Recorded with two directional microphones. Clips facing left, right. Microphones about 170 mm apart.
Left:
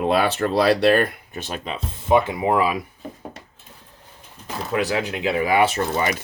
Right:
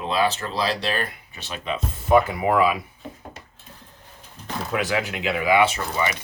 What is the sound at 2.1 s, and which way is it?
Speech, 25° left (ahead or behind).